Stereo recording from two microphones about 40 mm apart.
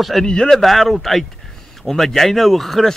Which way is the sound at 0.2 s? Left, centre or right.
Centre.